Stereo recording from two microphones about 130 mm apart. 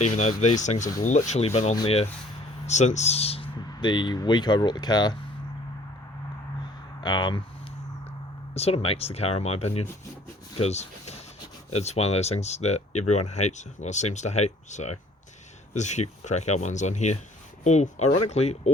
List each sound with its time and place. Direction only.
0.0 s speech: 60° left (ahead or behind); by 5.1 s 30° left (ahead or behind)
7.0 s speech: 35° left (ahead or behind)
8.5 s speech: 50° left (ahead or behind)